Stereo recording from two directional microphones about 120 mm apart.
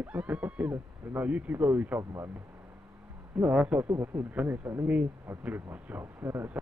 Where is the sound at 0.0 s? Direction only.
10° right (ahead or behind).